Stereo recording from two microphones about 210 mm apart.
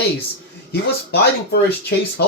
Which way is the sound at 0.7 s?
50° left (ahead or behind).